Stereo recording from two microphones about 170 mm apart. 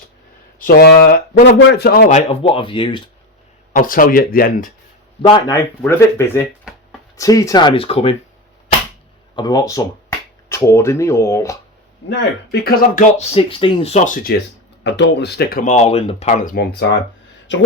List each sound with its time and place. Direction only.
0.6 s a man's voice: 65° left (ahead or behind)
2.0 s speech: 45° left (ahead or behind)
2.4 s speech: 30° left (ahead or behind)
3.7 s speech: 55° left (ahead or behind)
5.2 s speech: 30° left (ahead or behind)
5.8 s speech: 15° left (ahead or behind); by 8.1 s 35° left (ahead or behind)
9.3 s speech: 25° left (ahead or behind)
12.0 s a man's voice: 80° left; by 13.1 s 65° left (ahead or behind)
13.1 s speech: 35° left (ahead or behind); by 14.4 s 55° left (ahead or behind)
14.8 s speech: 90° left
17.5 s speech: 90° left